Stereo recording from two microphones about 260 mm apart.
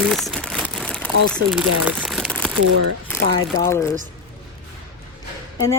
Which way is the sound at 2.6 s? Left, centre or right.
Right.